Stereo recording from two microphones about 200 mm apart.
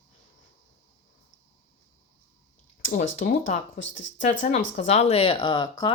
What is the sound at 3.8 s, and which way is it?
Speech, 70° left (ahead or behind).